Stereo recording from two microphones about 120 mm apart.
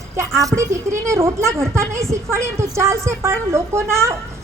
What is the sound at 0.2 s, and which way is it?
A woman's voice, 25° right (ahead or behind).